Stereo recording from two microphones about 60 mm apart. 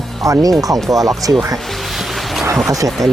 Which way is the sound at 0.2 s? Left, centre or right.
Right.